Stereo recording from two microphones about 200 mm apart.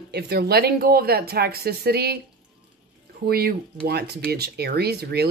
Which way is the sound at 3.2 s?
50° right (ahead or behind).